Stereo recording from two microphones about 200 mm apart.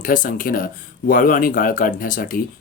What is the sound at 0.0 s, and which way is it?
Speech, 45° left (ahead or behind).